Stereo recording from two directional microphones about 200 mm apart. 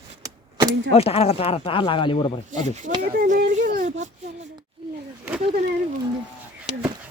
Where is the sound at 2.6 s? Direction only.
35° right (ahead or behind).